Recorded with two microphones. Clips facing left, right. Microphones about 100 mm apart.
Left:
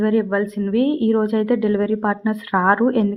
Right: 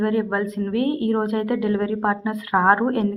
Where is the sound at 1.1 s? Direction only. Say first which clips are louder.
Left 4 dB; 10° right (ahead or behind).